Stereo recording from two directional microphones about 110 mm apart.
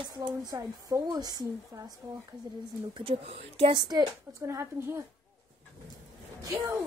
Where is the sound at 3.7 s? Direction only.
40° right (ahead or behind).